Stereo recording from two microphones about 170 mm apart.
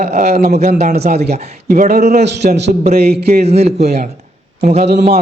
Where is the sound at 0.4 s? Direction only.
45° right (ahead or behind).